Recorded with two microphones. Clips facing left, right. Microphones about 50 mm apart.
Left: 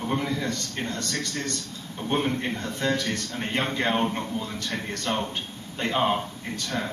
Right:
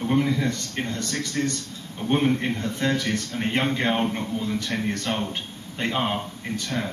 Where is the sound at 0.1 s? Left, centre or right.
Centre.